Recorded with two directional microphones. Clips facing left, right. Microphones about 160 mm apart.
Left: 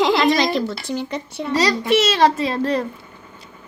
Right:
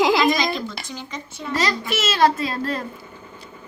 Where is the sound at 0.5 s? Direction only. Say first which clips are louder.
Left 8 dB; 65° left (ahead or behind).